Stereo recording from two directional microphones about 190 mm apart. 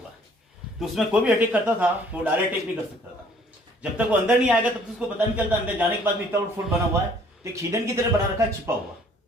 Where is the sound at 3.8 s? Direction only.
5° right (ahead or behind).